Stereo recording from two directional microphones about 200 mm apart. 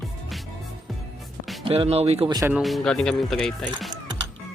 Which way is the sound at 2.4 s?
10° right (ahead or behind).